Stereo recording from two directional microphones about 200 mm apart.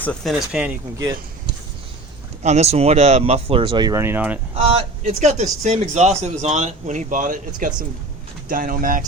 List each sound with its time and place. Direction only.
0.0 s speech: 5° left (ahead or behind)
2.4 s speech: 35° right (ahead or behind); by 4.4 s 10° right (ahead or behind)
4.5 s speech: 30° right (ahead or behind)